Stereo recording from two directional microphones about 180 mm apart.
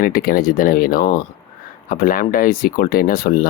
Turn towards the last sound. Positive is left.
turn(degrees=55)  # may be behind; listen again after turning